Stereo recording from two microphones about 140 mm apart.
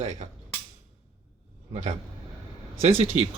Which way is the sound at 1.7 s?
55° right (ahead or behind).